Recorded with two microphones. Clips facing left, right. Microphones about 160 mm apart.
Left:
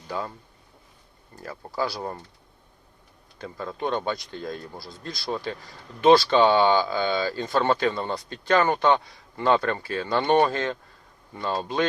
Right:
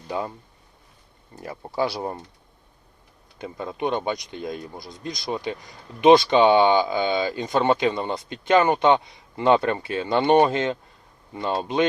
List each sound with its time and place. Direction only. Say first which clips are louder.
0.1 s speech: right 3 dB; 20° right (ahead or behind)
1.4 s speech: right 3 dB; 20° right (ahead or behind)
3.3 s speech: right 2 dB; 20° right (ahead or behind)